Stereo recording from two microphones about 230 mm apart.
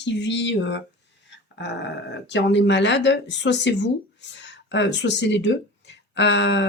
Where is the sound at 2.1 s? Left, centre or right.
Left.